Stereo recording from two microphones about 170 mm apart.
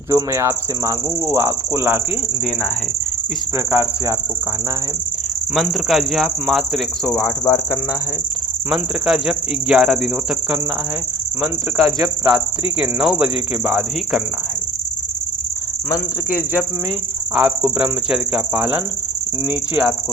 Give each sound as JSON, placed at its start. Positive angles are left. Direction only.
{"t": 0.1, "sound": "cricket", "side_deg": -15}
{"t": 3.7, "sound": "cricket", "side_deg": -15}
{"t": 5.5, "sound": "speech", "side_deg": 0}
{"t": 7.1, "sound": "speech", "side_deg": 15}
{"t": 8.7, "sound": "speech", "side_deg": -5}
{"t": 11.9, "sound": "speech", "side_deg": -20}
{"t": 12.8, "sound": "speech", "side_deg": -5}
{"t": 17.3, "sound": "cricket", "side_deg": -5}